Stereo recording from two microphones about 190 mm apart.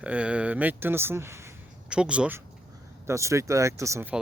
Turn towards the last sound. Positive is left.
turn(degrees=-15)  # may be behind; listen again after turning